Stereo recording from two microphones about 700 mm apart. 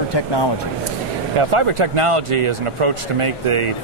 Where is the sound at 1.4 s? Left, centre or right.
Right.